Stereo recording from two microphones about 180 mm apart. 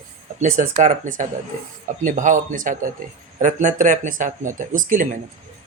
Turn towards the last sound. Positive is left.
turn(degrees=-45)  # may be behind; listen again after turning